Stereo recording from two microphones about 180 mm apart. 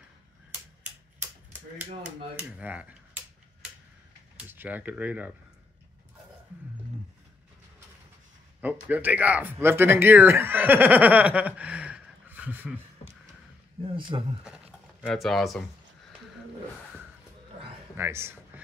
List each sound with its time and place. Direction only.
2.3 s speech: 10° right (ahead or behind)
4.4 s speech: 10° right (ahead or behind)
8.5 s speech: 10° right (ahead or behind)
13.9 s speech: 25° right (ahead or behind)
14.4 s speech: 5° right (ahead or behind)
17.9 s speech: 15° right (ahead or behind)